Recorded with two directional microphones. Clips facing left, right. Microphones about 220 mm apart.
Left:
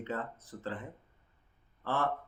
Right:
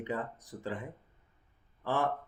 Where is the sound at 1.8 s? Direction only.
15° right (ahead or behind).